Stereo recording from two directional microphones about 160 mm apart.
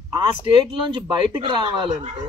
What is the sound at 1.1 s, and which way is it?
Speech, 35° right (ahead or behind).